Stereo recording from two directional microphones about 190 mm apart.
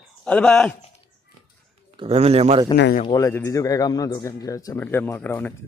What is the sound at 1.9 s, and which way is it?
Speech, 30° right (ahead or behind).